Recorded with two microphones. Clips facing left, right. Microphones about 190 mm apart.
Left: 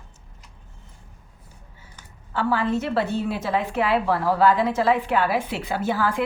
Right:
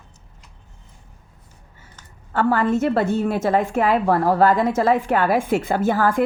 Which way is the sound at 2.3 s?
50° right (ahead or behind).